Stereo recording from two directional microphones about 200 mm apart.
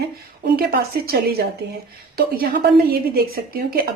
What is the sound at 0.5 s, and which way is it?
A woman's voice, 50° right (ahead or behind).